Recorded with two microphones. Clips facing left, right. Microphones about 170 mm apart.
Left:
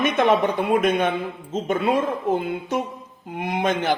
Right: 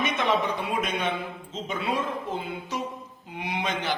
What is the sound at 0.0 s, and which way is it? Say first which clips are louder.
A man's voice: left 7 dB; 50° left (ahead or behind).